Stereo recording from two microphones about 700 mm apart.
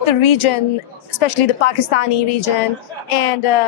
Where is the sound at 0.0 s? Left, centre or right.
Left.